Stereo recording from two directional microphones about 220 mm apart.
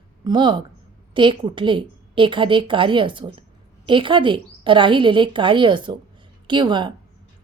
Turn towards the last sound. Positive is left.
turn(degrees=-20)  # may be behind; listen again after turning